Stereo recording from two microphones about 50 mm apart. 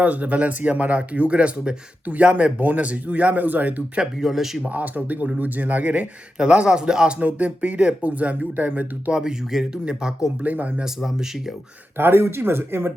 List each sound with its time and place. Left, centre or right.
0.0 s speech: right; by 4.6 s centre
4.7 s speech: right; by 7.2 s centre
7.2 s speech: right
9.1 s speech: centre
10.4 s speech: right
10.8 s speech: centre
11.9 s speech: right